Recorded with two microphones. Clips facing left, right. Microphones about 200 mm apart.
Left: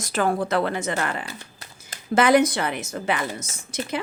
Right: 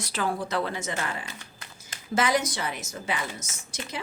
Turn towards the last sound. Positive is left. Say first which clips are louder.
# left 7 dB
turn(degrees=60)  # may be behind; listen again after turning